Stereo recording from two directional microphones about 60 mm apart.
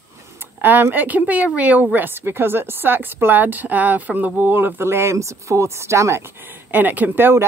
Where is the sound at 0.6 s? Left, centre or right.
Right.